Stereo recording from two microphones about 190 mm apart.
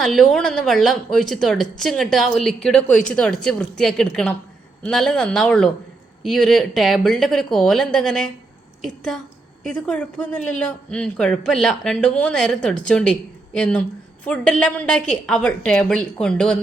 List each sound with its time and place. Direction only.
0.0 s speech: centre (ahead or behind)